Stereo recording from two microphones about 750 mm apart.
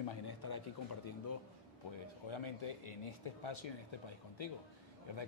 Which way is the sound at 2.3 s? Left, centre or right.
Left.